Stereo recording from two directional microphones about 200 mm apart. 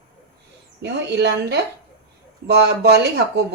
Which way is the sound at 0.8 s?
60° right (ahead or behind).